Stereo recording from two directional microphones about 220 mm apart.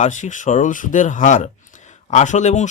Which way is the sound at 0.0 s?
35° left (ahead or behind).